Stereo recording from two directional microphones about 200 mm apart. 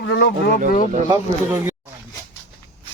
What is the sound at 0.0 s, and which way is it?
Speech, 55° left (ahead or behind).